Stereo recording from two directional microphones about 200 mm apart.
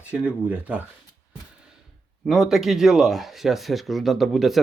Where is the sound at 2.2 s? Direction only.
Centre (ahead or behind).